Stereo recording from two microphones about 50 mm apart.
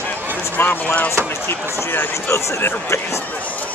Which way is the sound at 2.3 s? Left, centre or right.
Left.